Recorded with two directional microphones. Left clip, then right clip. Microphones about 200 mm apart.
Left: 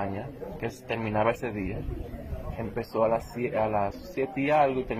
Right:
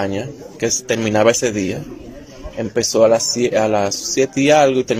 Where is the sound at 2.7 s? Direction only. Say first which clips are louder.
Right 13 dB; 60° right (ahead or behind).